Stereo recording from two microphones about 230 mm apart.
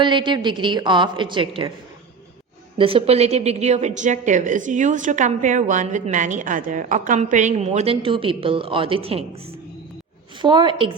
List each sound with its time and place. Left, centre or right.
0.0 s a woman's voice: centre
2.7 s a woman's voice: right